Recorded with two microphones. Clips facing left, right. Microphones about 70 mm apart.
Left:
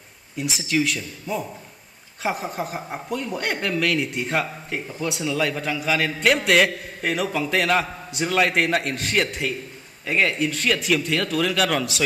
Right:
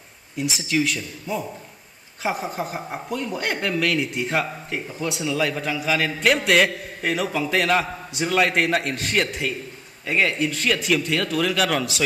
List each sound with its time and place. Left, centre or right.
0.4 s speech: centre